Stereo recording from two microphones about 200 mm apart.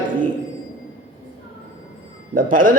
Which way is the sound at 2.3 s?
45° right (ahead or behind).